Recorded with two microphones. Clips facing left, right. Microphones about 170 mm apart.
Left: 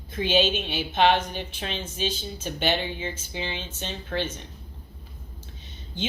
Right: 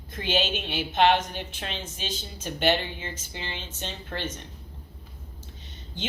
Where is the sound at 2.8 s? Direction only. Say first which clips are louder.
Left 5 dB; 15° left (ahead or behind).